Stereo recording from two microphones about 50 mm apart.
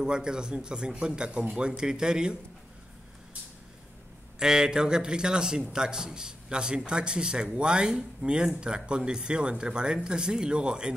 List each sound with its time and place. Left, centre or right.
0.0 s speech: centre
4.4 s speech: centre